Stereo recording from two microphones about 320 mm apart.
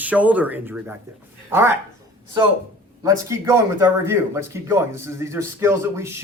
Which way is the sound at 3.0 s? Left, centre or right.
Centre.